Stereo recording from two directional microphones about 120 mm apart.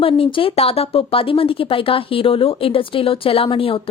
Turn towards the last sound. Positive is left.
turn(degrees=50)  # may be behind; listen again after turning